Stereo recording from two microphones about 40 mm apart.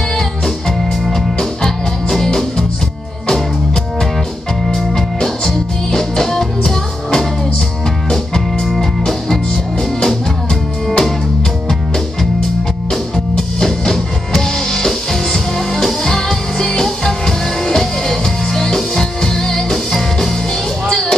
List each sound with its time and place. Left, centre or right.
1.1 s music: centre
4.7 s music: centre
10.0 s music: centre
12.9 s music: centre